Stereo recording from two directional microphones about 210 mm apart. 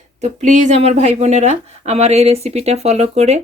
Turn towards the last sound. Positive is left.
turn(degrees=-30)  # may be behind; listen again after turning